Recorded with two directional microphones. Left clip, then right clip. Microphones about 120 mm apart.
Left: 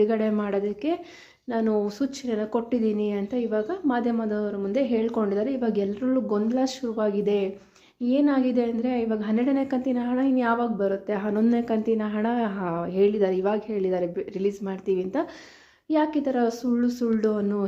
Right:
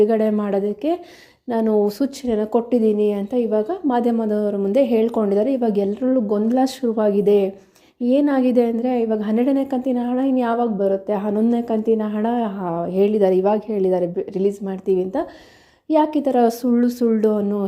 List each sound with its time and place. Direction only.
0.0 s a woman's voice: 35° right (ahead or behind)
6.8 s speech: 50° right (ahead or behind)
9.6 s a woman's voice: 30° right (ahead or behind)
12.9 s a woman's voice: 45° right (ahead or behind); by 15.3 s 25° right (ahead or behind)
15.9 s speech: 50° right (ahead or behind)